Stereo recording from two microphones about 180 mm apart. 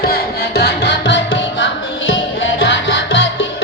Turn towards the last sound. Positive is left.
turn(degrees=90)